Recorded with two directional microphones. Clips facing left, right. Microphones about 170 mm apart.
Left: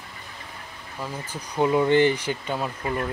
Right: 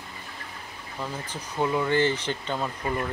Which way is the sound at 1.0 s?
15° left (ahead or behind).